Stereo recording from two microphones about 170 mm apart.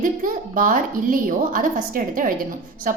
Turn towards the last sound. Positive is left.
turn(degrees=-55)  # may be behind; listen again after turning